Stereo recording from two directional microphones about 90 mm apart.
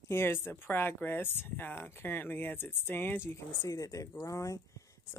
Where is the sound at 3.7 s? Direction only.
40° left (ahead or behind).